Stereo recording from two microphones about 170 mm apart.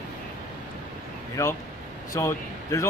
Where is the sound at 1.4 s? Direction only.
20° left (ahead or behind).